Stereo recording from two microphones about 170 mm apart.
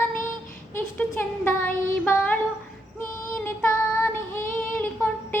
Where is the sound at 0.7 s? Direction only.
10° left (ahead or behind).